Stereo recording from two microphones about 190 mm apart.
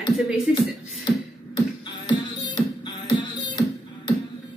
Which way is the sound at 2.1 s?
25° left (ahead or behind).